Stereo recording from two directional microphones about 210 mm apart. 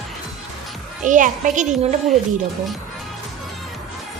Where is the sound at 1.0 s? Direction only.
40° right (ahead or behind).